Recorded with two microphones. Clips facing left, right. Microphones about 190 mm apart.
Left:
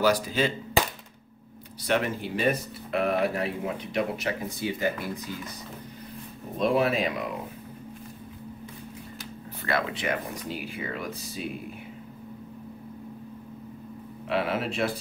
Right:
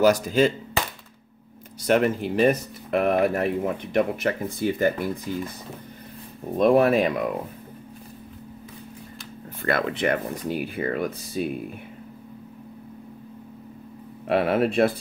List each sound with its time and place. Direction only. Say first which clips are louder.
0.0 s speech: right 6 dB; 45° right (ahead or behind)
1.8 s speech: right 6 dB; 45° right (ahead or behind)
6.6 s speech: right 6 dB; 55° right (ahead or behind)
9.6 s speech: right 5 dB; 50° right (ahead or behind)
14.2 s speech: right 7 dB; 55° right (ahead or behind)